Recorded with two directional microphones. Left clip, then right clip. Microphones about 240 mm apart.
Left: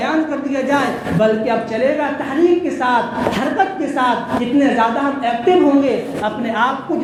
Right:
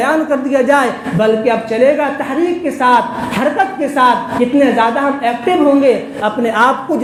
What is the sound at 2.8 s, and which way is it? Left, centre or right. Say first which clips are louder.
A woman's voice: right 5 dB; right.